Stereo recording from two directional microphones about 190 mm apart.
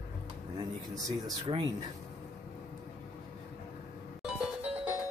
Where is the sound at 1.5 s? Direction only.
30° right (ahead or behind).